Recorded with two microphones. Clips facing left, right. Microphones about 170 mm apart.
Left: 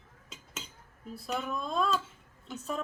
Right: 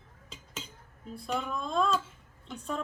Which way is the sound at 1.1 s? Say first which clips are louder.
Right 1 dB; 5° left (ahead or behind).